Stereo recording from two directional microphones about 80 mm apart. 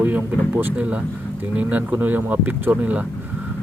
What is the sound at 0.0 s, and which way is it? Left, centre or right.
Speech, right.